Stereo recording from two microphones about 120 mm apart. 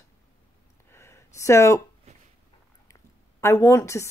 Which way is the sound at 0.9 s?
20° left (ahead or behind).